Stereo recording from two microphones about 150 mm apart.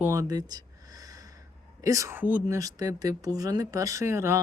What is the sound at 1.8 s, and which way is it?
Speech, 20° right (ahead or behind).